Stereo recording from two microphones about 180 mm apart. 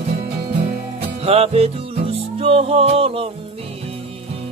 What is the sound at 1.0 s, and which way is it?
Music, 35° right (ahead or behind).